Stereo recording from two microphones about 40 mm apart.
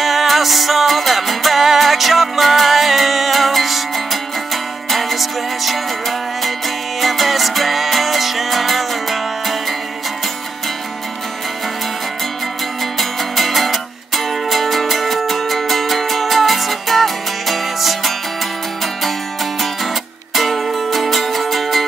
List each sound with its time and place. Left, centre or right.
0.0 s music: centre
13.4 s music: centre
20.3 s music: centre